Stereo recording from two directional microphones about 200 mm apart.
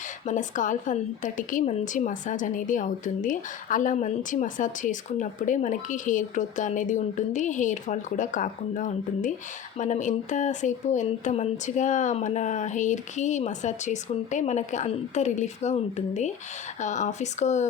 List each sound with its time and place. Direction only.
0.3 s a woman's voice: 40° left (ahead or behind)